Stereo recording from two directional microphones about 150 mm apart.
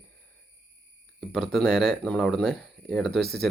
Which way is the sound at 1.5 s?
Centre (ahead or behind).